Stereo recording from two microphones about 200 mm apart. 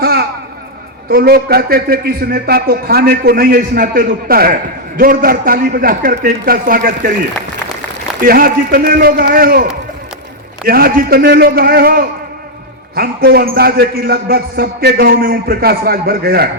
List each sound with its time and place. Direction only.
0.0 s a sound: 50° right (ahead or behind)
1.1 s a man's voice: 50° right (ahead or behind)
8.2 s a man's voice: 45° right (ahead or behind)
10.7 s a man's voice: 50° right (ahead or behind)